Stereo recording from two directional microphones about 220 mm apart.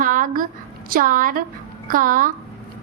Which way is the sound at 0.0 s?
35° right (ahead or behind).